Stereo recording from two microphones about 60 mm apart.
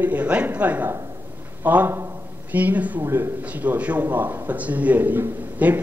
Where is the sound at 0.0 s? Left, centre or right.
Right.